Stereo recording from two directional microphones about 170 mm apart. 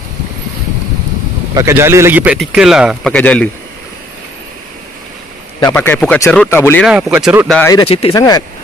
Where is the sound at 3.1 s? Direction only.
10° left (ahead or behind).